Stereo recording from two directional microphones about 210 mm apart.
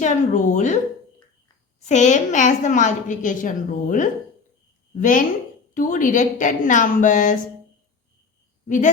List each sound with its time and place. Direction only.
0.0 s a woman's voice: 35° left (ahead or behind)
1.8 s a woman's voice: 35° left (ahead or behind)
8.6 s speech: 40° left (ahead or behind)